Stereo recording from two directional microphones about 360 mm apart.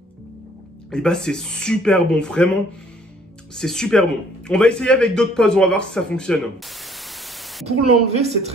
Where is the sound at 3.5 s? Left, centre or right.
Centre.